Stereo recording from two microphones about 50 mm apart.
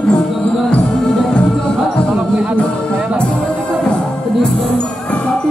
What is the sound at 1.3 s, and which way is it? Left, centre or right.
Music, centre.